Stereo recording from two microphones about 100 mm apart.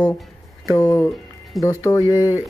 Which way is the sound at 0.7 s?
30° left (ahead or behind).